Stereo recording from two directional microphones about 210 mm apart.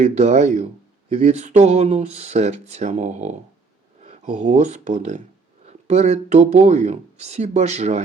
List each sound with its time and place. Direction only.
0.0 s speech: 30° right (ahead or behind)